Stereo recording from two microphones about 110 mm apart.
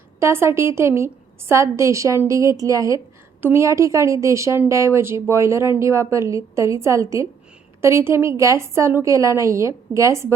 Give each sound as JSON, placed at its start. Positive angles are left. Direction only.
{"t": 0.2, "sound": "a woman's voice", "side_deg": -25}